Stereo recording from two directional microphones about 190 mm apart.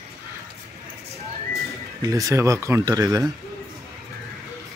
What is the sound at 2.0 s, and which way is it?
Speech, 15° right (ahead or behind).